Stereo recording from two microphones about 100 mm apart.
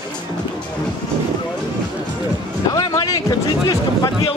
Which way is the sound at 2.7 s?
40° left (ahead or behind).